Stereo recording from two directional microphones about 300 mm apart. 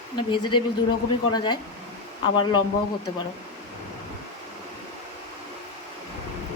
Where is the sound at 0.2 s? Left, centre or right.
Centre.